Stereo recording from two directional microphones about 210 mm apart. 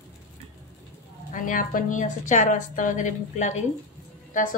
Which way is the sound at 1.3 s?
40° left (ahead or behind).